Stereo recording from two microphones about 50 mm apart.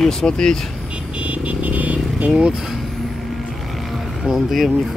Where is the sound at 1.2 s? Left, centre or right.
Right.